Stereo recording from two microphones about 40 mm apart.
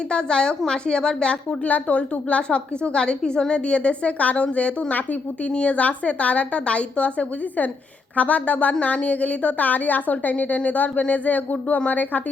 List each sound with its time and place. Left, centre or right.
0.1 s a woman's voice: left
5.7 s a woman's voice: left